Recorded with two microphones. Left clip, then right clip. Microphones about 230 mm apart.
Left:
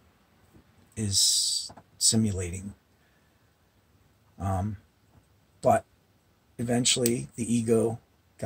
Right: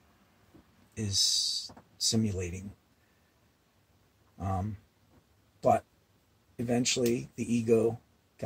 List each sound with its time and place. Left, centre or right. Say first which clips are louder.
0.9 s speech: left 3 dB; centre
4.4 s speech: left 3 dB; left